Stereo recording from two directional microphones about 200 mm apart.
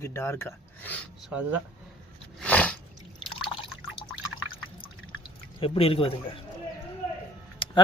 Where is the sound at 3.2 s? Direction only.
25° left (ahead or behind).